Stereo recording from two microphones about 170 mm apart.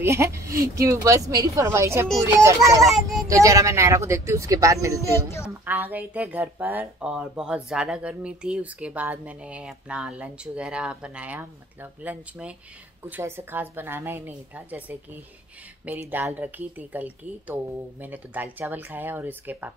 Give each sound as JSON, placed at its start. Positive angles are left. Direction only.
{"t": 0.0, "sound": "speech", "side_deg": -15}
{"t": 2.8, "sound": "speech", "side_deg": 0}
{"t": 3.3, "sound": "speech", "side_deg": -20}